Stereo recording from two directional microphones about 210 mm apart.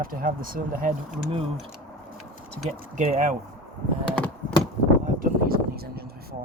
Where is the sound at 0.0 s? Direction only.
45° right (ahead or behind).